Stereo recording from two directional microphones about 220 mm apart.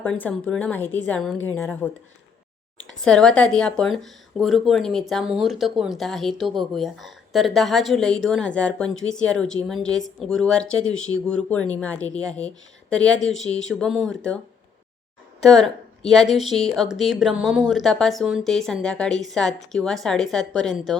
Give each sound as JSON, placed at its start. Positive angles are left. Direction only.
{"t": 0.0, "sound": "a woman's voice", "side_deg": 5}
{"t": 3.0, "sound": "speech", "side_deg": 5}
{"t": 10.9, "sound": "speech", "side_deg": 65}
{"t": 11.3, "sound": "a woman's voice", "side_deg": 5}
{"t": 15.4, "sound": "speech", "side_deg": 0}